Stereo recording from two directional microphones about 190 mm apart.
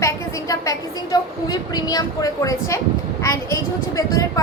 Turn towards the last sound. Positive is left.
turn(degrees=15)  # may be behind; listen again after turning